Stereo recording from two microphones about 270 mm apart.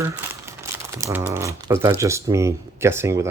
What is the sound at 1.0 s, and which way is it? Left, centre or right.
Speech, centre.